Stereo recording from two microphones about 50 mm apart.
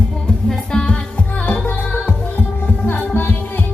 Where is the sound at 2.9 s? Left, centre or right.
Left.